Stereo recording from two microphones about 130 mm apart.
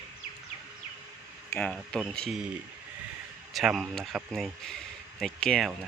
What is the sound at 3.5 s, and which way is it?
Speech, centre (ahead or behind).